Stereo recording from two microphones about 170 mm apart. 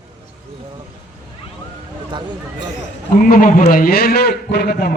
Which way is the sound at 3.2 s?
55° left (ahead or behind).